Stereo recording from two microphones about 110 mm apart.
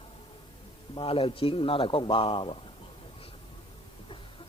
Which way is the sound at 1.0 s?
55° left (ahead or behind).